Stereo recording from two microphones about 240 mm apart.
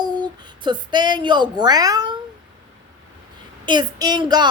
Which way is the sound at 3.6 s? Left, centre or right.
Centre.